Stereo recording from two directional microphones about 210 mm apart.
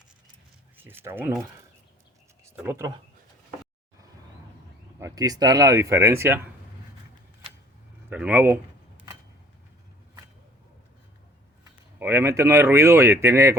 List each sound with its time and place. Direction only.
0.8 s speech: 10° right (ahead or behind)
2.6 s speech: 10° right (ahead or behind)
4.9 s speech: 15° right (ahead or behind)
8.1 s speech: 5° right (ahead or behind)
11.6 s speech: 10° right (ahead or behind)